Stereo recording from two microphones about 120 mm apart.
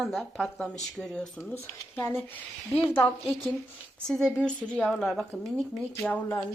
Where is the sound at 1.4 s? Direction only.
25° left (ahead or behind).